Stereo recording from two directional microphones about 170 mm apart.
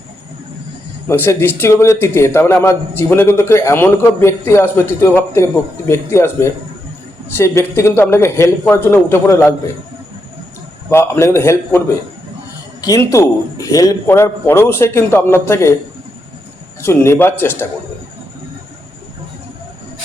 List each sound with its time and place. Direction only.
1.0 s a man's voice: 15° left (ahead or behind)
10.8 s a man's voice: 15° left (ahead or behind)
16.8 s a man's voice: 15° left (ahead or behind)